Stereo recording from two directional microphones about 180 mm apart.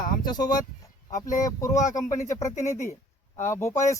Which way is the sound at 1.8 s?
45° left (ahead or behind).